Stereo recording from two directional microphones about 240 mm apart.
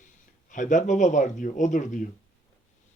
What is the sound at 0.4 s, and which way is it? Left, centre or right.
Speech, left.